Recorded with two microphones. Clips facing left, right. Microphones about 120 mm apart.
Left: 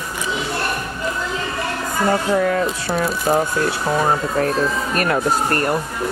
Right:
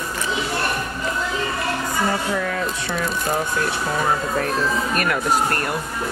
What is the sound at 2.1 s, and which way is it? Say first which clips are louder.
Speech: left 6 dB; 40° left (ahead or behind).